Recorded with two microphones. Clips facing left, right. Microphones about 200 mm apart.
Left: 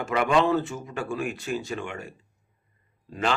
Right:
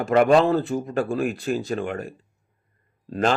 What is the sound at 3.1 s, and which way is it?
Speech, 45° right (ahead or behind).